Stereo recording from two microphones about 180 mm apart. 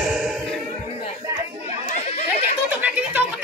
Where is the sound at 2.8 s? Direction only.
10° right (ahead or behind).